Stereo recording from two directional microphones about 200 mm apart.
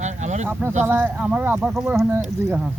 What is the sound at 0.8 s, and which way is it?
Speech, 10° right (ahead or behind).